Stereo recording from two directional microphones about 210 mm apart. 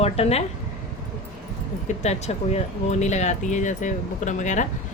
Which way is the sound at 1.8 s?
30° left (ahead or behind).